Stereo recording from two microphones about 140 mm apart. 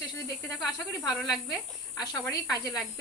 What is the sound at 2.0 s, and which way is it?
Speech, 30° left (ahead or behind).